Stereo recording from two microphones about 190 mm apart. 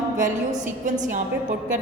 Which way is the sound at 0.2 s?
40° right (ahead or behind).